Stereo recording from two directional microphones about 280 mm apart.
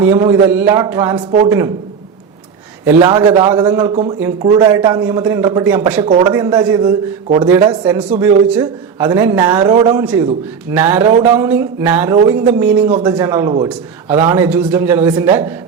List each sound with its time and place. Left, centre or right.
0.0 s a man's voice: centre
2.8 s a man's voice: centre